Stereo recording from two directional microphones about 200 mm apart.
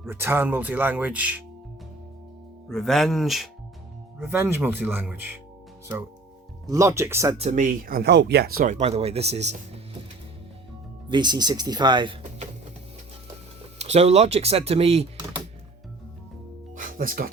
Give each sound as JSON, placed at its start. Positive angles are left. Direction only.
{"t": 0.0, "sound": "speech", "side_deg": -10}
{"t": 2.6, "sound": "speech", "side_deg": 0}
{"t": 4.2, "sound": "speech", "side_deg": -10}
{"t": 6.7, "sound": "speech", "side_deg": -15}
{"t": 7.3, "sound": "speech", "side_deg": -35}
{"t": 11.1, "sound": "speech", "side_deg": -20}
{"t": 13.7, "sound": "speech", "side_deg": -35}
{"t": 16.7, "sound": "music", "side_deg": -45}